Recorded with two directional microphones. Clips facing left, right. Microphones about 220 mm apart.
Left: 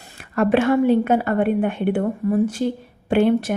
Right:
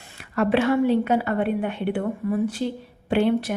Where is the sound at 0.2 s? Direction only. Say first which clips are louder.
Left 3 dB; 50° left (ahead or behind).